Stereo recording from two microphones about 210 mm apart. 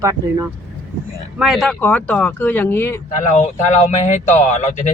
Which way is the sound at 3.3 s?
35° left (ahead or behind).